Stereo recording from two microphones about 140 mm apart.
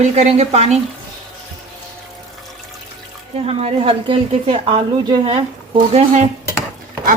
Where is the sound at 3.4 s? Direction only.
45° right (ahead or behind).